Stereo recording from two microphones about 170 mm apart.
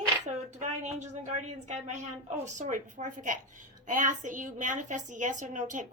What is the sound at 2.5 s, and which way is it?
A woman's voice, 45° right (ahead or behind).